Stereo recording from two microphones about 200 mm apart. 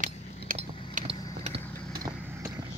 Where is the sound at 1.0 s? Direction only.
30° right (ahead or behind).